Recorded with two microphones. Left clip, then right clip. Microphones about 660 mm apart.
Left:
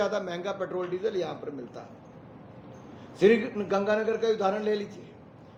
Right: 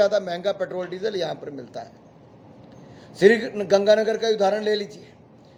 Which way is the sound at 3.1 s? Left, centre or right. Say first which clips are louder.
Right 5 dB; right.